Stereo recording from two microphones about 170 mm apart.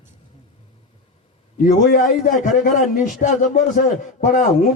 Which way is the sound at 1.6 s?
50° left (ahead or behind).